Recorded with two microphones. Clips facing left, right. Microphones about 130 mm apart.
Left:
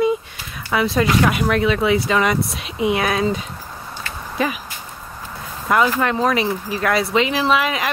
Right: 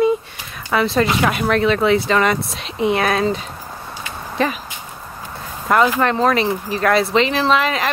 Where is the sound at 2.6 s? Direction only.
5° left (ahead or behind).